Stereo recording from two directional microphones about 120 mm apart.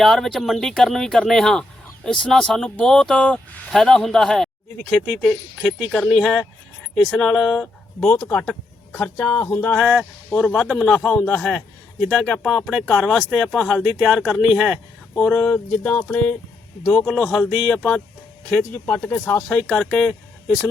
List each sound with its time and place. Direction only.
0.0 s a man's voice: centre (ahead or behind)